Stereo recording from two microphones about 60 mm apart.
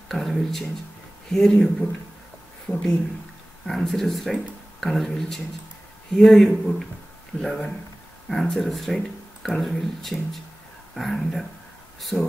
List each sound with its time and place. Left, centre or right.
0.1 s speech: centre
2.7 s speech: centre
12.1 s speech: left